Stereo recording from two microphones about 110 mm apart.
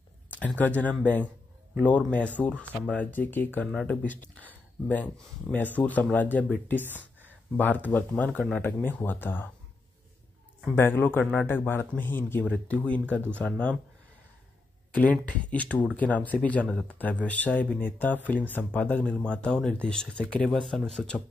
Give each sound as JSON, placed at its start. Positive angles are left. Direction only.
{"t": 0.6, "sound": "a man's voice", "side_deg": 15}
{"t": 10.7, "sound": "a man's voice", "side_deg": 20}
{"t": 15.0, "sound": "speech", "side_deg": 10}